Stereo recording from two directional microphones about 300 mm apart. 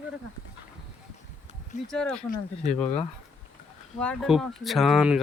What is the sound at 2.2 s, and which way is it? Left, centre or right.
Speech, left.